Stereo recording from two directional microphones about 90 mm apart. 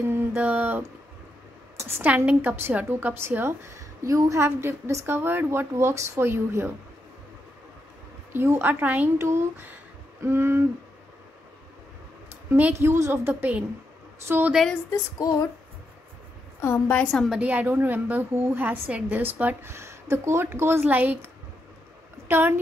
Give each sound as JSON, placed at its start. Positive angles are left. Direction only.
{"t": 0.0, "sound": "a sound", "side_deg": -25}
{"t": 1.8, "sound": "a woman's voice", "side_deg": -30}
{"t": 8.3, "sound": "a woman's voice", "side_deg": -25}
{"t": 9.2, "sound": "a woman's voice", "side_deg": -30}
{"t": 12.4, "sound": "a woman's voice", "side_deg": -20}
{"t": 14.3, "sound": "a woman's voice", "side_deg": -30}
{"t": 16.6, "sound": "a woman's voice", "side_deg": 30}
{"t": 16.9, "sound": "a woman's voice", "side_deg": 10}
{"t": 17.3, "sound": "a woman's voice", "side_deg": -15}
{"t": 19.7, "sound": "a woman's voice", "side_deg": -30}
{"t": 22.3, "sound": "a woman's voice", "side_deg": -25}